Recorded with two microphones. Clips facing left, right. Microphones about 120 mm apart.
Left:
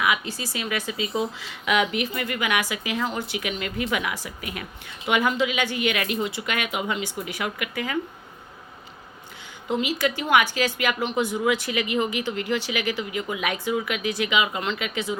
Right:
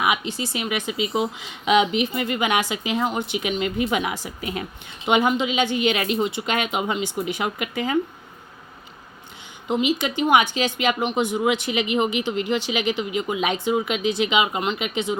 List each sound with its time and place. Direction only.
0.0 s speech: 25° right (ahead or behind)
9.6 s speech: 20° right (ahead or behind)